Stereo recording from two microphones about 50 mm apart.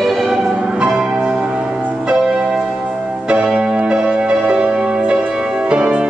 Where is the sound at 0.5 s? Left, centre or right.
Right.